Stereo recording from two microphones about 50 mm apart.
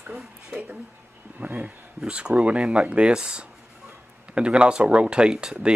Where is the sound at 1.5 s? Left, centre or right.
Right.